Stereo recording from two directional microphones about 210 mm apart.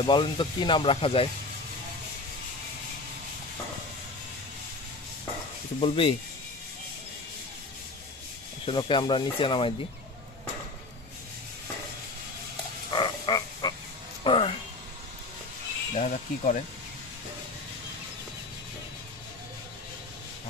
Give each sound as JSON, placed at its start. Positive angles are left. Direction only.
{"t": 0.0, "sound": "speech", "side_deg": 25}
{"t": 5.8, "sound": "speech", "side_deg": 25}
{"t": 8.6, "sound": "speech", "side_deg": 25}
{"t": 12.9, "sound": "frog", "side_deg": 20}
{"t": 14.2, "sound": "a sound", "side_deg": 25}
{"t": 15.9, "sound": "speech", "side_deg": 35}